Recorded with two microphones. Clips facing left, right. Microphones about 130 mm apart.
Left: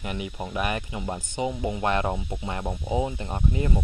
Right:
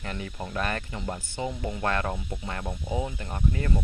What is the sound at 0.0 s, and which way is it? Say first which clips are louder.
Speech: left 3 dB; 15° left (ahead or behind).